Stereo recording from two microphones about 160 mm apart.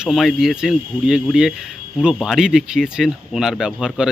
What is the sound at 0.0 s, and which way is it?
Speech, centre (ahead or behind).